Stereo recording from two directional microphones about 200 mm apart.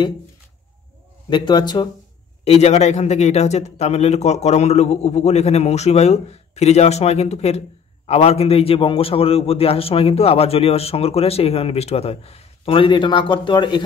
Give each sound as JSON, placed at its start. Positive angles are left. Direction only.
{"t": 1.3, "sound": "a man's voice", "side_deg": 20}